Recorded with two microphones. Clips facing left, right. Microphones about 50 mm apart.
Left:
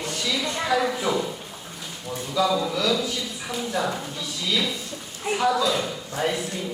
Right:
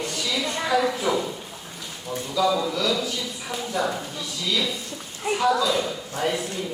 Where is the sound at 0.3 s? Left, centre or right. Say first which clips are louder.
Even; centre.